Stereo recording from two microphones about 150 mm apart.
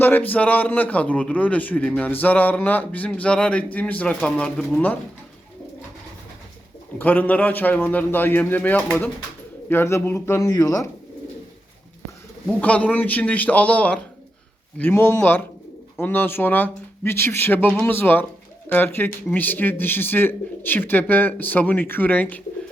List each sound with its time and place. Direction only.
0.0 s a man's voice: 10° left (ahead or behind)
7.0 s a man's voice: 10° left (ahead or behind)
12.5 s a man's voice: 10° left (ahead or behind)